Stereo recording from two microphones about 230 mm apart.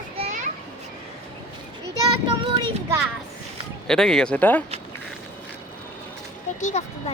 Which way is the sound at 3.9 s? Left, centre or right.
Centre.